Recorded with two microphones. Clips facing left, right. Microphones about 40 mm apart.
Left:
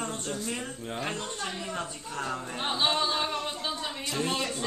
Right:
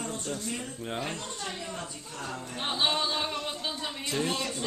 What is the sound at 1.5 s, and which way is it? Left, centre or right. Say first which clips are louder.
Speech: left 3 dB; centre.